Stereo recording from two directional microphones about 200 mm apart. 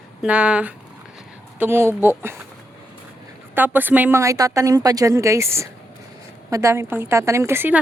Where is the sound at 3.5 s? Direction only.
10° right (ahead or behind).